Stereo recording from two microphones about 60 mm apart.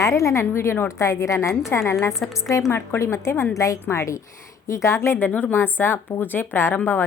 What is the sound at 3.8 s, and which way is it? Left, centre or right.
A woman's voice, left.